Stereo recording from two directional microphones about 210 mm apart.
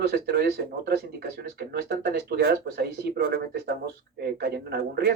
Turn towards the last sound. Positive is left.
turn(degrees=-50)  # may be behind; listen again after turning